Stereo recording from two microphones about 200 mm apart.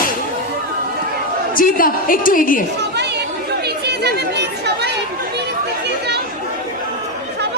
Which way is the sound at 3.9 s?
55° right (ahead or behind).